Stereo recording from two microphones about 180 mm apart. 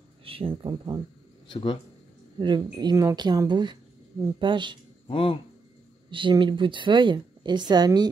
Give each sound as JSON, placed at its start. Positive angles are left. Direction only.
{"t": 0.2, "sound": "speech", "side_deg": -30}
{"t": 1.5, "sound": "speech", "side_deg": 25}
{"t": 2.3, "sound": "a woman's voice", "side_deg": -25}
{"t": 5.0, "sound": "speech", "side_deg": 30}
{"t": 6.0, "sound": "a woman's voice", "side_deg": -25}